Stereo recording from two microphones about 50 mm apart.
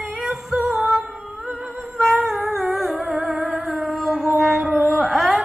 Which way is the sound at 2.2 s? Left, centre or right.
Centre.